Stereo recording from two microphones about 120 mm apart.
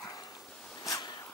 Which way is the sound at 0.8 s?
30° left (ahead or behind).